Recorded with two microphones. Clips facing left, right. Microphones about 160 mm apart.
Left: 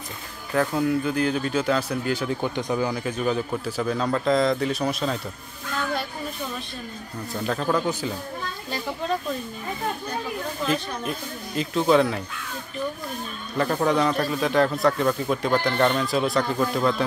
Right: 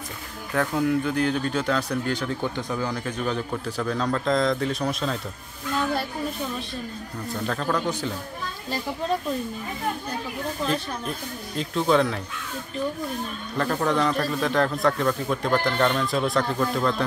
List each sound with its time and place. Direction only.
0.6 s speech: 5° left (ahead or behind)
7.4 s speech: 5° left (ahead or behind)
10.7 s speech: 5° left (ahead or behind)
13.6 s speech: 5° left (ahead or behind)